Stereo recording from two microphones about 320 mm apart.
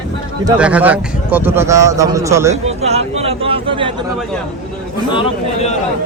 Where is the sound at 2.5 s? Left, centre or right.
Centre.